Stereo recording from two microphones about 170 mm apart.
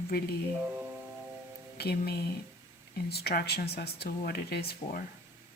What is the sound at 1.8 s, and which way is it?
Speech, 70° left (ahead or behind).